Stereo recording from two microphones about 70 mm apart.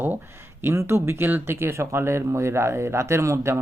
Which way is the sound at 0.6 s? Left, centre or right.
Right.